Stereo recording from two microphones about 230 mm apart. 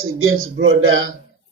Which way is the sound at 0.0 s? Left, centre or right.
Right.